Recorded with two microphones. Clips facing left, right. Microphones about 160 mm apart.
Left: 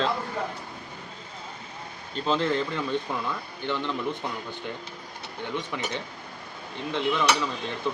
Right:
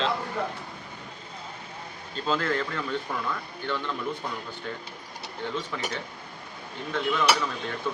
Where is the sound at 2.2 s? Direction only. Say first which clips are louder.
Left 2 dB; 20° left (ahead or behind).